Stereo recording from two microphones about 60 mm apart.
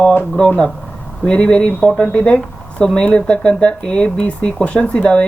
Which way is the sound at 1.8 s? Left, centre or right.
Centre.